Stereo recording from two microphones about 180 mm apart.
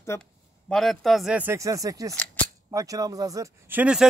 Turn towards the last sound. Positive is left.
turn(degrees=-5)  # may be behind; listen again after turning